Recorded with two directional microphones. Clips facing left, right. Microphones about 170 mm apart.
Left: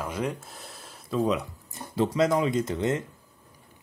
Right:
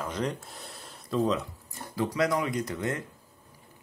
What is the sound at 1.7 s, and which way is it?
Speech, 25° left (ahead or behind).